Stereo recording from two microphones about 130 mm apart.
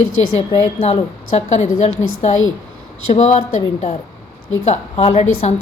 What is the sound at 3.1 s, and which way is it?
A woman's voice, 65° left (ahead or behind).